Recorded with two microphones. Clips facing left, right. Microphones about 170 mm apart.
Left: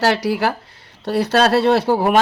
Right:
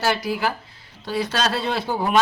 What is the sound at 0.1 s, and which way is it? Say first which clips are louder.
Speech: left 5 dB; 70° left (ahead or behind).